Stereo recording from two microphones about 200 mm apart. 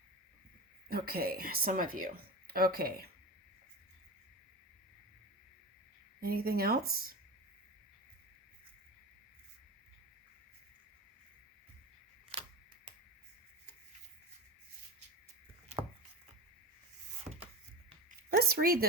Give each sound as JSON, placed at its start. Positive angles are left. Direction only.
{"t": 0.9, "sound": "speech", "side_deg": -50}
{"t": 6.1, "sound": "speech", "side_deg": -50}
{"t": 12.3, "sound": "camera", "side_deg": -30}
{"t": 18.2, "sound": "speech", "side_deg": -50}